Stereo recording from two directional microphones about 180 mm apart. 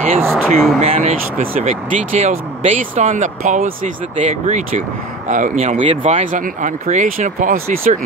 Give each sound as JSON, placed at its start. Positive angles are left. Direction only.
{"t": 0.3, "sound": "speech", "side_deg": 0}
{"t": 0.7, "sound": "speech", "side_deg": -35}